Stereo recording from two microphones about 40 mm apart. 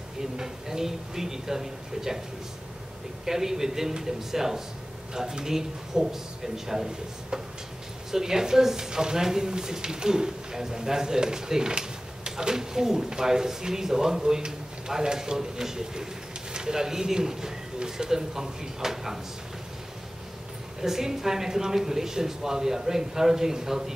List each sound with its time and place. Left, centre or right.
0.2 s speech: centre
3.3 s speech: centre
8.1 s speech: centre
20.8 s speech: centre